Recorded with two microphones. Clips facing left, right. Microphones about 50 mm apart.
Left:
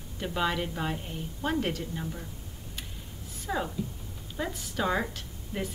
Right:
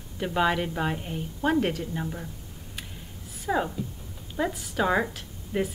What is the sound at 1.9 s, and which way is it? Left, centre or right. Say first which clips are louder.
Speech: right 4 dB; centre.